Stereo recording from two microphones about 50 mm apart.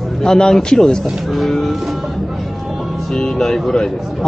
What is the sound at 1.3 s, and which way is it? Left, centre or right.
Music, centre.